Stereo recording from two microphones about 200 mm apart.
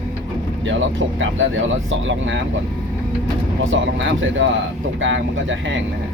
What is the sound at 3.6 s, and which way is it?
Speech, 75° right (ahead or behind).